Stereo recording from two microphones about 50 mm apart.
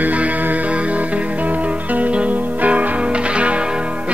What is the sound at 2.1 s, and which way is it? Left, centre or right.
Music, right.